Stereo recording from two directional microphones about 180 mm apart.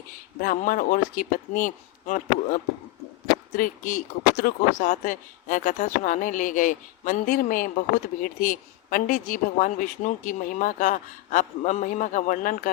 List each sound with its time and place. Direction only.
0.4 s speech: 50° left (ahead or behind)